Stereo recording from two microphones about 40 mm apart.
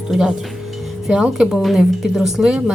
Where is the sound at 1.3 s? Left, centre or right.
Centre.